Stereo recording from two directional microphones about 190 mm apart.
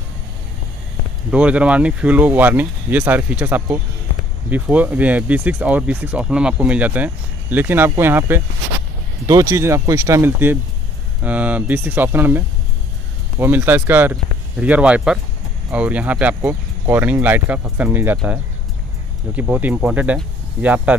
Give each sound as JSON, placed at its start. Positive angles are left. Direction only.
{"t": 1.3, "sound": "speech", "side_deg": -5}